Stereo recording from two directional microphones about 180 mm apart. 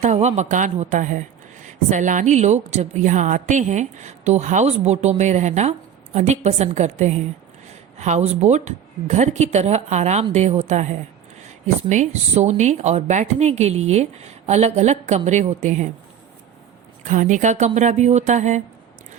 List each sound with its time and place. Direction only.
0.0 s speech: 40° right (ahead or behind)
17.0 s a woman's voice: 45° right (ahead or behind)